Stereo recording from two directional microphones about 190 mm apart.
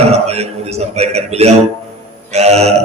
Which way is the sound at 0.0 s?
35° right (ahead or behind).